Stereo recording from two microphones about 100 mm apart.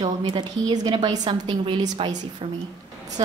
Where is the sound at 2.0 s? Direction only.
65° right (ahead or behind).